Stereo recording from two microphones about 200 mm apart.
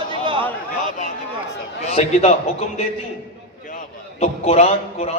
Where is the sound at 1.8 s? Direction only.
35° left (ahead or behind).